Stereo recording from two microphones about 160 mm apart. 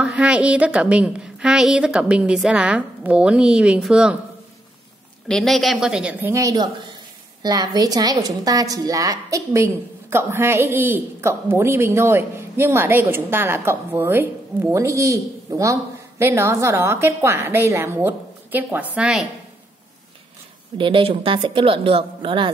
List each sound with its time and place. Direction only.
0.0 s a woman's voice: 5° right (ahead or behind)
5.3 s a woman's voice: centre (ahead or behind)
20.7 s a woman's voice: 30° right (ahead or behind)